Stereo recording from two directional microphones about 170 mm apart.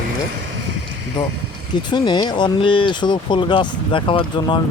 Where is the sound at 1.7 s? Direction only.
25° left (ahead or behind).